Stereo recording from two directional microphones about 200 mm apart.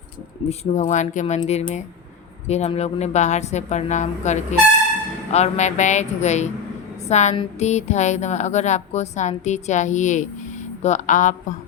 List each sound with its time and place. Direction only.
0.4 s a woman's voice: 35° left (ahead or behind)